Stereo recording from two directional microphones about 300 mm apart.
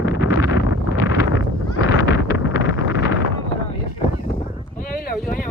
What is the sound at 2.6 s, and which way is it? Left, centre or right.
Vehicle, left.